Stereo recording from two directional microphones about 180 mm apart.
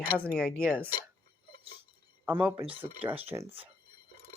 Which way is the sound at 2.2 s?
10° right (ahead or behind).